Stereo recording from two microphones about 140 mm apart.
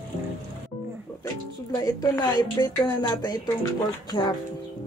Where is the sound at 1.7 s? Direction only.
25° left (ahead or behind).